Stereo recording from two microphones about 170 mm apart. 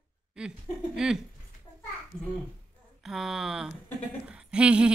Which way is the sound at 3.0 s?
Centre (ahead or behind).